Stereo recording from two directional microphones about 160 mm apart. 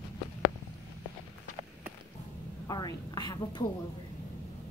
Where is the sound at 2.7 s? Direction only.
25° left (ahead or behind).